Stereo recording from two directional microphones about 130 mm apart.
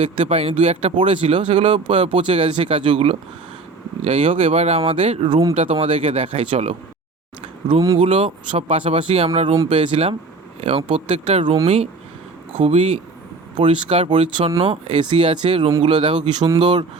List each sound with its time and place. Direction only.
0.0 s speech: 50° right (ahead or behind)
7.9 s speech: 45° right (ahead or behind)
13.6 s speech: 40° right (ahead or behind)